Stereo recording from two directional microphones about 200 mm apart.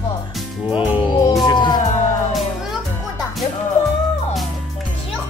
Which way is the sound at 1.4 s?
20° left (ahead or behind).